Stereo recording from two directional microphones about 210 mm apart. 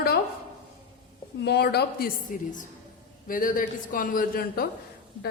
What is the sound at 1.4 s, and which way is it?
A man's voice, 50° left (ahead or behind).